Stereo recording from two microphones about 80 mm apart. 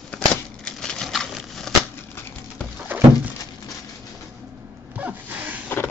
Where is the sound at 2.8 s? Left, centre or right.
Right.